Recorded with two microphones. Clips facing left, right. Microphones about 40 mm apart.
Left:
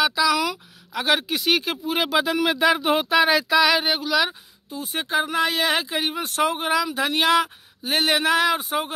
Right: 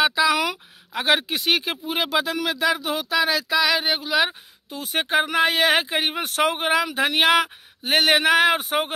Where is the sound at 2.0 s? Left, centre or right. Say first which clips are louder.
Left 3 dB; centre; by 3.4 s left.